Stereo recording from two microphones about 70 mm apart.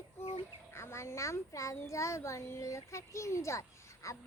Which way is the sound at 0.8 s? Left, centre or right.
Left.